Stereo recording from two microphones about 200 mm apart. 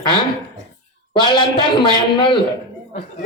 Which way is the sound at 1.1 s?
20° left (ahead or behind).